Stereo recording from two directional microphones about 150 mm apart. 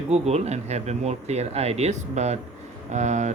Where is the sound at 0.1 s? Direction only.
45° right (ahead or behind).